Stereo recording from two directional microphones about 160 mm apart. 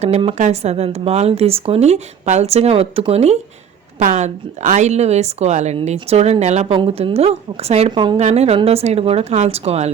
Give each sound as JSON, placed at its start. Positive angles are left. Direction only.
{"t": 0.3, "sound": "a woman's voice", "side_deg": -45}
{"t": 8.2, "sound": "speech", "side_deg": -45}